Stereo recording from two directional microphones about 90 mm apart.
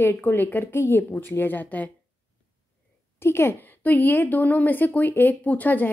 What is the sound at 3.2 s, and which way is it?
Speech, 25° left (ahead or behind).